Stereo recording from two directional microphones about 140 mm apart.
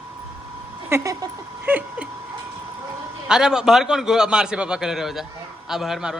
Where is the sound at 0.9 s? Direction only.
20° right (ahead or behind).